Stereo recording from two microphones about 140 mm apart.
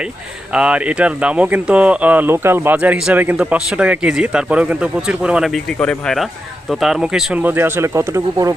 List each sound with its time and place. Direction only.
0.5 s speech: 10° right (ahead or behind)
5.8 s speech: 5° left (ahead or behind)
7.4 s speech: 15° right (ahead or behind)